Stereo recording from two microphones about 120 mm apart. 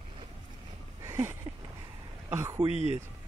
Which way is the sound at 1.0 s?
25° right (ahead or behind).